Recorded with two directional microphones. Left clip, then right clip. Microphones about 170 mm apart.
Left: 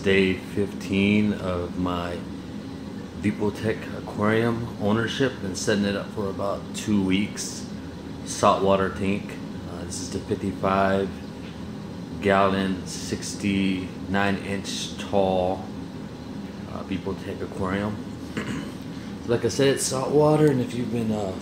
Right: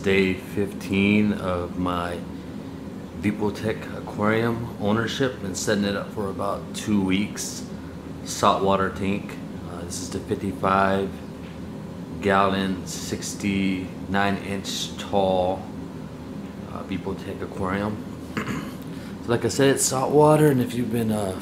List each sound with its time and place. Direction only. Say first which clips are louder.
0.0 s speech: even; 10° left (ahead or behind)
3.2 s speech: right 1 dB; 10° left (ahead or behind)
8.4 s speech: even; 10° left (ahead or behind)
10.6 s speech: right 2 dB; 5° left (ahead or behind)
12.2 s speech: even; 10° left (ahead or behind)
17.6 s speech: right 1 dB; 5° left (ahead or behind)
19.2 s speech: right 1 dB; centre (ahead or behind)
20.2 s speech: right 2 dB; 15° right (ahead or behind)